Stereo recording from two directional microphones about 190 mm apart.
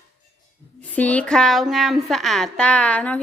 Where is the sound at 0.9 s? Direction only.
5° left (ahead or behind).